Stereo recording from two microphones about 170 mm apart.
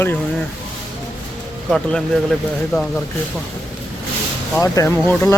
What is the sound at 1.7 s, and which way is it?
Speech, centre (ahead or behind).